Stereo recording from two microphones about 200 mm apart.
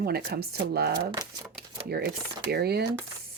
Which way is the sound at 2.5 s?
55° right (ahead or behind).